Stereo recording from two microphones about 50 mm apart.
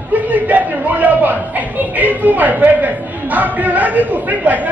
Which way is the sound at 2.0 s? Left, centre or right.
Right.